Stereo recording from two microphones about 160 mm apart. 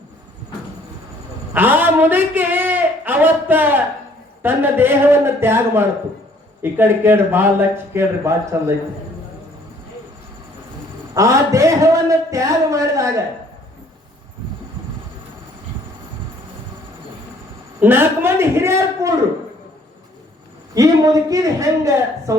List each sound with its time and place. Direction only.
1.5 s a man's voice: 10° right (ahead or behind)
11.1 s a man's voice: 20° right (ahead or behind)
17.7 s speech: 10° right (ahead or behind)
20.7 s a man's voice: 20° right (ahead or behind)